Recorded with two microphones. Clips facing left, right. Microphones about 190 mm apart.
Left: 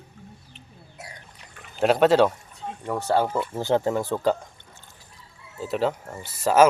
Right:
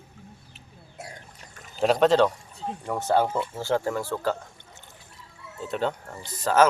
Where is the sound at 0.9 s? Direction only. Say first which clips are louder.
Right 3 dB; 45° right (ahead or behind).